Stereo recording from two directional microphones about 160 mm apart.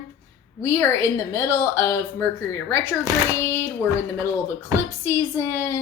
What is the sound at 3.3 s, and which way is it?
A woman's voice, 15° left (ahead or behind).